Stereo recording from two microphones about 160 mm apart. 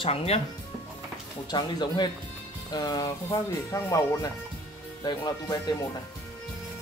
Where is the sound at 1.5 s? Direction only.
25° left (ahead or behind).